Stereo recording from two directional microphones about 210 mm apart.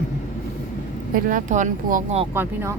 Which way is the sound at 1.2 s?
35° right (ahead or behind).